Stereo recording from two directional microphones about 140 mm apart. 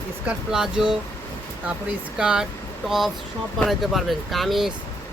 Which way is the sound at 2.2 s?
5° right (ahead or behind).